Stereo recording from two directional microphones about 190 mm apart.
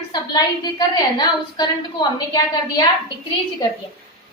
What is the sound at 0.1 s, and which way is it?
A woman's voice, 20° left (ahead or behind).